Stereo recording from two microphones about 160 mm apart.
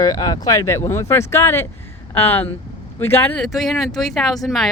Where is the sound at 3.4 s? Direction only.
Centre (ahead or behind).